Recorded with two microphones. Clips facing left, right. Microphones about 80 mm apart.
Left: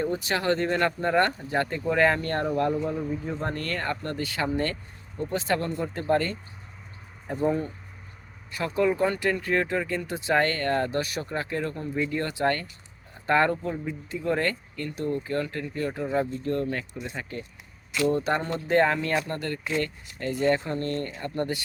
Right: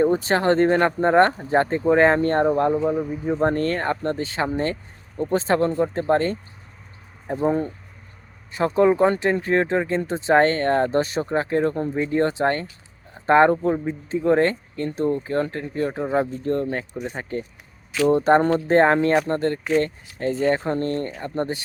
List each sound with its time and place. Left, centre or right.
0.0 s speech: right
3.4 s speech: right
8.5 s speech: right